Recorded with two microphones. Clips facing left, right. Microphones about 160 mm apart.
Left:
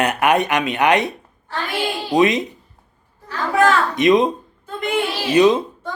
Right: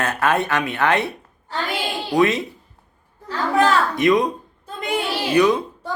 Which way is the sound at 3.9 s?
20° left (ahead or behind).